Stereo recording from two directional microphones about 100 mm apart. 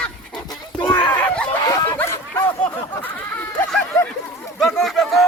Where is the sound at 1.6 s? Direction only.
35° left (ahead or behind).